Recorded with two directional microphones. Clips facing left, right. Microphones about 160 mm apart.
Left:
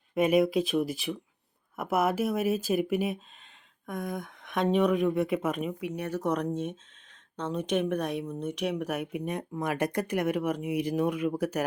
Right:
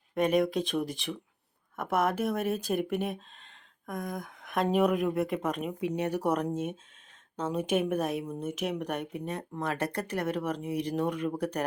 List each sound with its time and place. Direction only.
0.1 s speech: 5° left (ahead or behind)
5.8 s speech: 15° right (ahead or behind)
6.3 s speech: 5° right (ahead or behind)